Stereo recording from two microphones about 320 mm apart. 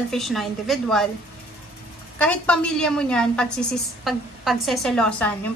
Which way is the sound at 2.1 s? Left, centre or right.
Centre.